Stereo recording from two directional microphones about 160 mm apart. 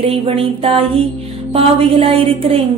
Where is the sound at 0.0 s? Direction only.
35° right (ahead or behind).